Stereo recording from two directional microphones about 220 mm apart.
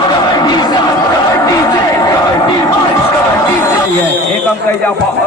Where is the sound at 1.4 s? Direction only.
15° left (ahead or behind).